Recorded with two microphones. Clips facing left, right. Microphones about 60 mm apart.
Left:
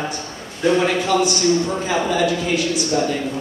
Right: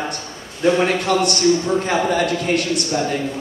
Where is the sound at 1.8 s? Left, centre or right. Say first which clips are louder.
Even; right.